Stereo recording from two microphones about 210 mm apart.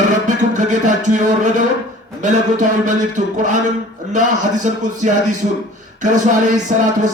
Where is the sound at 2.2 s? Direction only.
35° right (ahead or behind).